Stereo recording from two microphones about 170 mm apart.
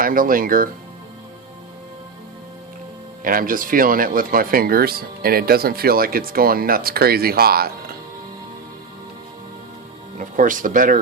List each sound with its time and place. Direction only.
0.0 s speech: 55° right (ahead or behind)
3.2 s speech: 55° right (ahead or behind)
10.2 s speech: 50° right (ahead or behind)